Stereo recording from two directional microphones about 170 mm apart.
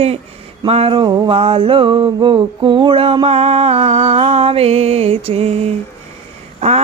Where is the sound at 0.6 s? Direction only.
35° right (ahead or behind).